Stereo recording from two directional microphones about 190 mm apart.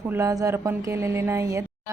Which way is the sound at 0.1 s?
15° right (ahead or behind).